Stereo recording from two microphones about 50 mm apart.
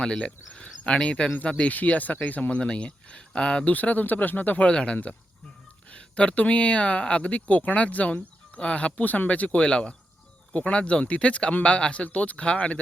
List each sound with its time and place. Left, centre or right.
0.0 s speech: centre
1.7 s speech: left